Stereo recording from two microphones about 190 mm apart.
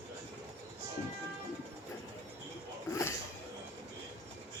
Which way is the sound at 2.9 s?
15° left (ahead or behind).